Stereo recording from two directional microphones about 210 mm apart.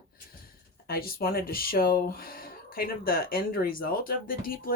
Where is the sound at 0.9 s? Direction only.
45° left (ahead or behind).